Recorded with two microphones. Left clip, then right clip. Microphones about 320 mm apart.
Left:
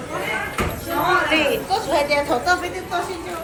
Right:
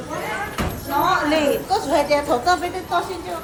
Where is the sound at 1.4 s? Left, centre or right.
Right.